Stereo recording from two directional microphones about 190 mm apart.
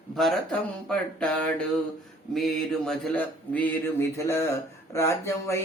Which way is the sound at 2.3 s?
Centre (ahead or behind).